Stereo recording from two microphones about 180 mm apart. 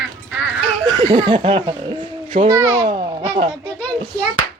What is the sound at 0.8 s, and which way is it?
A child's voice, 20° right (ahead or behind).